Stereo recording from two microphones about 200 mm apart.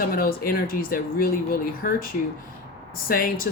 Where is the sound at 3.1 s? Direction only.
45° left (ahead or behind).